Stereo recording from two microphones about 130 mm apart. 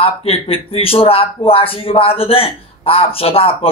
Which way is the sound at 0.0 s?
50° left (ahead or behind).